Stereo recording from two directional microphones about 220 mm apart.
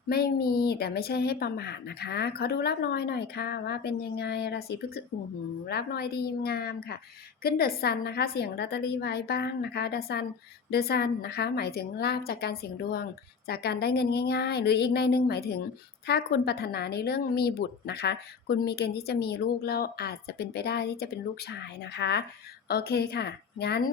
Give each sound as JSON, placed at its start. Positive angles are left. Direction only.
{"t": 0.1, "sound": "a woman's voice", "side_deg": 45}